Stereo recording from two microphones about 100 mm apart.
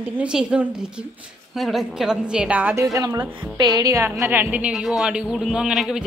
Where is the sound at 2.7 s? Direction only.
35° right (ahead or behind); by 4.7 s 15° right (ahead or behind).